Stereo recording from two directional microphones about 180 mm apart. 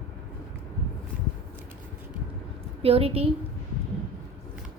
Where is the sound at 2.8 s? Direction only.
35° right (ahead or behind).